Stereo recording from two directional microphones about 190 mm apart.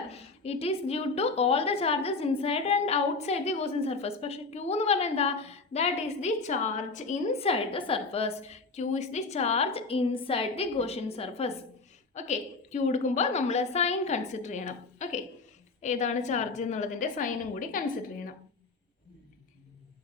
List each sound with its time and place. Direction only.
0.1 s a woman's voice: 30° left (ahead or behind)